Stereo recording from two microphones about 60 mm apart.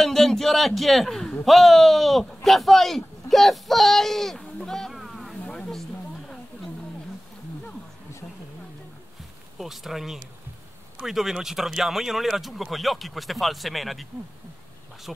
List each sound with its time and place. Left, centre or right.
0.0 s a man's voice: centre
4.6 s boat: centre
5.4 s a sound: centre
9.6 s speech: centre
15.1 s speech: centre